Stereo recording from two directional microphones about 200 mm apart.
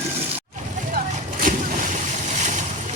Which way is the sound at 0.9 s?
40° right (ahead or behind).